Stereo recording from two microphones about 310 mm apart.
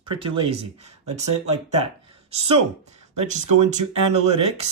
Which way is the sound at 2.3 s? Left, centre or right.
Centre.